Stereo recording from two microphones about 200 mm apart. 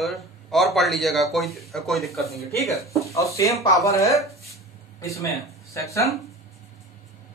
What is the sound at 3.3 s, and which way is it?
Speech, 15° left (ahead or behind).